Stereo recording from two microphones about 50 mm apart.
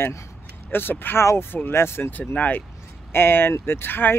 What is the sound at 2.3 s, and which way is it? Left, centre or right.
Speech, left.